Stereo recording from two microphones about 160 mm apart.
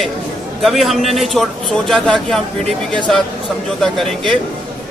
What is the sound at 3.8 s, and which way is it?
Speech, centre (ahead or behind).